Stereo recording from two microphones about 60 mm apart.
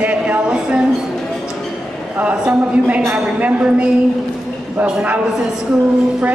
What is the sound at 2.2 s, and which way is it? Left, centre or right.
A woman's voice, right.